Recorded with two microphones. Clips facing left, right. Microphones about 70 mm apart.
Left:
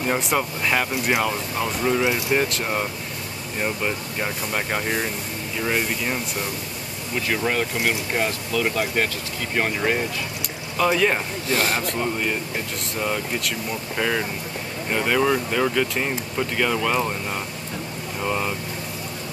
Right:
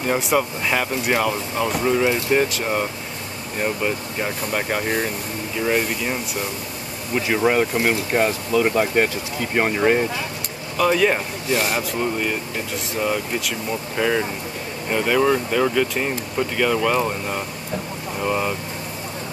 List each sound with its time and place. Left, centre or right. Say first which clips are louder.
0.0 s speech: right 3 dB; centre
2.0 s speech: right 2 dB; centre
2.3 s speech: right 3 dB; centre
7.2 s speech: right 5 dB; centre
10.8 s speech: right 2 dB; centre